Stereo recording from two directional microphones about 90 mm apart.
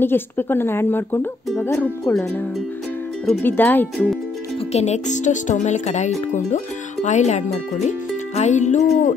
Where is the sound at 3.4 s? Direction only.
20° left (ahead or behind).